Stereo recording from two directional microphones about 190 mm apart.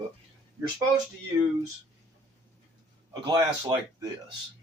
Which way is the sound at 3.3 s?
20° right (ahead or behind).